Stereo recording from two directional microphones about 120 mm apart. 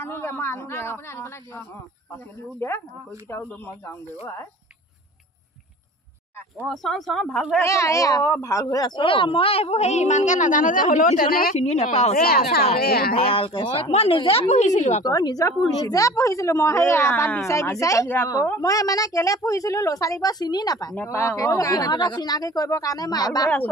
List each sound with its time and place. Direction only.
0.0 s a woman's voice: 20° left (ahead or behind)
6.7 s speech: centre (ahead or behind)
7.6 s a woman's voice: 25° left (ahead or behind); by 11.0 s 90° left
11.5 s a woman's voice: 65° left (ahead or behind)
13.2 s speech: 50° left (ahead or behind)
14.5 s a woman's voice: 75° left (ahead or behind)
15.0 s a woman's voice: 30° left (ahead or behind)
18.3 s a woman's voice: 30° left (ahead or behind)
20.9 s speech: 15° left (ahead or behind); by 23.5 s 35° left (ahead or behind)